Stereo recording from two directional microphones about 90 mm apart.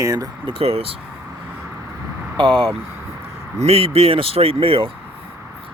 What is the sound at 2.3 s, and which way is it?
Speech, 65° right (ahead or behind).